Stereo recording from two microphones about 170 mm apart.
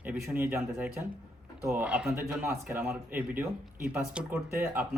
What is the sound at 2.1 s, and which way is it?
Speech, 15° right (ahead or behind).